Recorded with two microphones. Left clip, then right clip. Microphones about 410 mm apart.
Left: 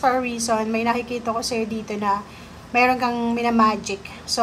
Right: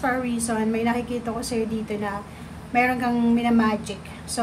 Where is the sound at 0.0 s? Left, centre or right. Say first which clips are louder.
Left 4 dB; centre.